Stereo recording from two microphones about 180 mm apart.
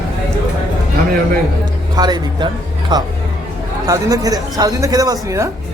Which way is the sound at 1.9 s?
25° right (ahead or behind).